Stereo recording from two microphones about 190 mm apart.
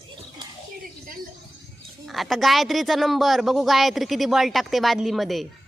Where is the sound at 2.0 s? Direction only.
Centre (ahead or behind).